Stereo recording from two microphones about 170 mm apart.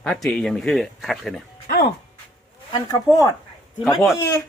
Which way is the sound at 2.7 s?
20° left (ahead or behind).